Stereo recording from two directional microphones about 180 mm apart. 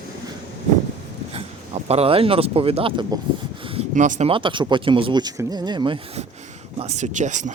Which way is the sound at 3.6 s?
30° right (ahead or behind).